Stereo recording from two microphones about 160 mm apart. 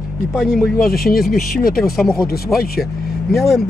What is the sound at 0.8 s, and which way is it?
Speech, 65° left (ahead or behind).